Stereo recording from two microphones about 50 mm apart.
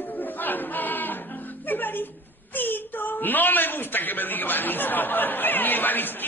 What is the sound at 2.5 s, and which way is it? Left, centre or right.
A woman's voice, left.